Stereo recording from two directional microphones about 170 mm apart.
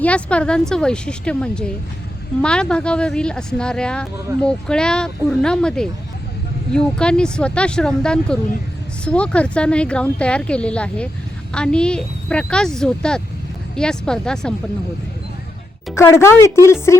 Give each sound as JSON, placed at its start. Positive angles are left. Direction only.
{"t": 0.0, "sound": "a woman's voice", "side_deg": 5}
{"t": 16.0, "sound": "speech", "side_deg": 15}